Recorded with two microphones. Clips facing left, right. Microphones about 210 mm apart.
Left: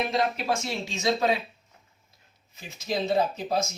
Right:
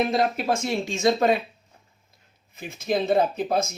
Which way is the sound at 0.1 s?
50° right (ahead or behind).